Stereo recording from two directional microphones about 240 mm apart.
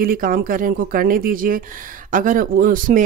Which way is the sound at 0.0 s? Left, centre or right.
Right.